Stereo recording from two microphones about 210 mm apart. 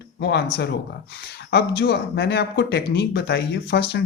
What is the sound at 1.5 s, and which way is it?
Speech, 50° left (ahead or behind).